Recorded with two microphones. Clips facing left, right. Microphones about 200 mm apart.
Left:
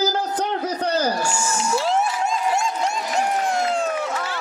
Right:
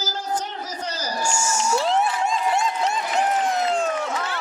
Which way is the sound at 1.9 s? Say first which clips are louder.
Even; centre (ahead or behind).